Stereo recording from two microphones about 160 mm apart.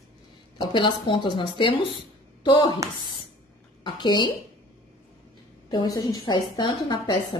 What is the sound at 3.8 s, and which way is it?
Speech, 30° left (ahead or behind).